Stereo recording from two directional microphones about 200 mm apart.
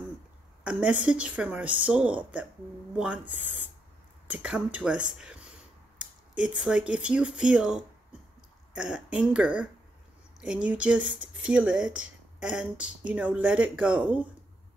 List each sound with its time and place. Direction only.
0.7 s speech: 5° right (ahead or behind)